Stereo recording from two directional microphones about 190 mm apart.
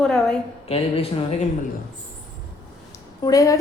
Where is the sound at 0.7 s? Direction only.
30° left (ahead or behind).